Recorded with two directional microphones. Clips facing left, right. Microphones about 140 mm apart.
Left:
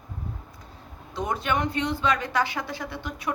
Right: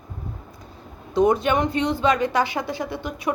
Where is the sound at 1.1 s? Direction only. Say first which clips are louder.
Right 9 dB; 20° right (ahead or behind).